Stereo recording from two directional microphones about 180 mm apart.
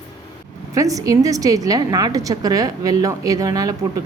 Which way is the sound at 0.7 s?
20° right (ahead or behind).